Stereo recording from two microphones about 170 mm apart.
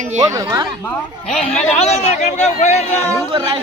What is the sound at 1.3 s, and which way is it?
Speech, 5° left (ahead or behind).